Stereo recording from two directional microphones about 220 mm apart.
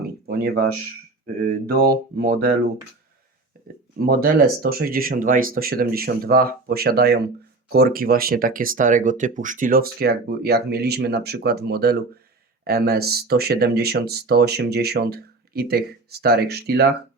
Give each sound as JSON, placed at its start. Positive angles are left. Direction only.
{"t": 0.3, "sound": "speech", "side_deg": -45}
{"t": 2.1, "sound": "speech", "side_deg": -45}
{"t": 3.9, "sound": "speech", "side_deg": -45}